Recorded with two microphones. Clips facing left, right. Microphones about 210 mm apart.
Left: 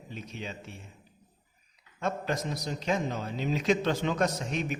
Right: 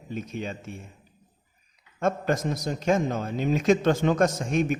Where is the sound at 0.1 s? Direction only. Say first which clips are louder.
Right 7 dB; 50° right (ahead or behind).